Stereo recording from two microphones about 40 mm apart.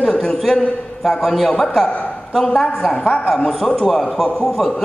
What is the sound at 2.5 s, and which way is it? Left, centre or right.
Speech, centre.